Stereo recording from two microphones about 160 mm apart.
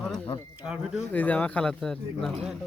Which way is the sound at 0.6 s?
5° right (ahead or behind).